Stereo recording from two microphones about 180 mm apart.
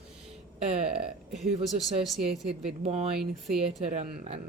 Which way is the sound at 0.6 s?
35° right (ahead or behind).